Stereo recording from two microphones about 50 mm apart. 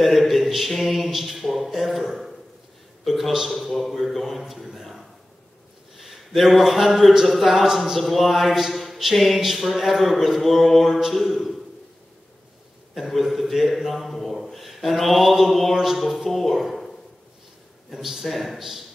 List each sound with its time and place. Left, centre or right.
0.0 s a man's voice: centre
13.1 s speech: centre
17.9 s speech: centre